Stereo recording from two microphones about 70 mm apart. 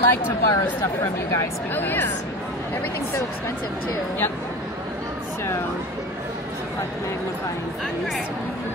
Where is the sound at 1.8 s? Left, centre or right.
Left.